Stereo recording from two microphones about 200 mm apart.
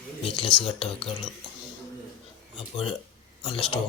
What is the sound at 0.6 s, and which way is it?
Speech, 30° left (ahead or behind).